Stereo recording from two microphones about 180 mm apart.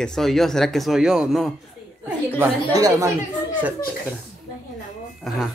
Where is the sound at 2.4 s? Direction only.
20° right (ahead or behind).